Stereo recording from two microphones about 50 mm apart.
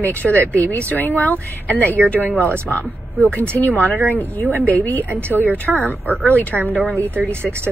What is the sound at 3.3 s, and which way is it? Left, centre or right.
Speech, right.